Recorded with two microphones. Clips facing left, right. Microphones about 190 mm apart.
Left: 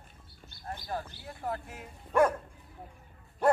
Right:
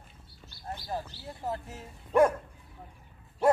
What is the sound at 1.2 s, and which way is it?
Speech, 25° right (ahead or behind).